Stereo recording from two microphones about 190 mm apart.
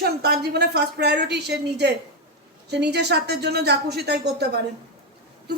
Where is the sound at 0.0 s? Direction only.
60° right (ahead or behind).